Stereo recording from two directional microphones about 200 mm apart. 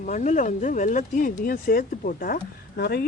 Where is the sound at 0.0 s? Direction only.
40° left (ahead or behind).